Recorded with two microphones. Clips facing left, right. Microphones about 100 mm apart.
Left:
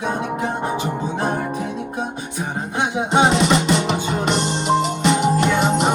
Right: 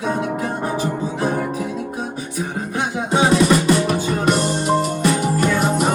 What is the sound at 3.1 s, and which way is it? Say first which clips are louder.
Music: right 1 dB; 20° left (ahead or behind).